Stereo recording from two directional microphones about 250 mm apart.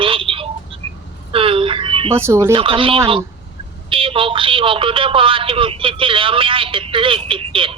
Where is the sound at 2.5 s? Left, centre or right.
Right.